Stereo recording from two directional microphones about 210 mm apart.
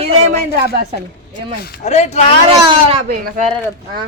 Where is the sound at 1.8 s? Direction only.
30° left (ahead or behind).